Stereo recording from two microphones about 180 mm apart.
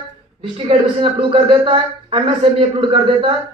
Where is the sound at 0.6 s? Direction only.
30° right (ahead or behind).